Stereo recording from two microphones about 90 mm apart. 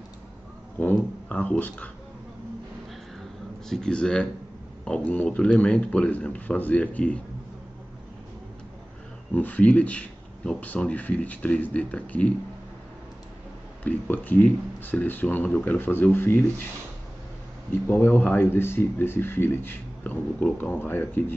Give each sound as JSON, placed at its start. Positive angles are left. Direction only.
{"t": 0.7, "sound": "speech", "side_deg": 15}
{"t": 3.6, "sound": "speech", "side_deg": 5}
{"t": 9.3, "sound": "speech", "side_deg": 20}
{"t": 13.8, "sound": "speech", "side_deg": 20}
{"t": 17.8, "sound": "speech", "side_deg": 25}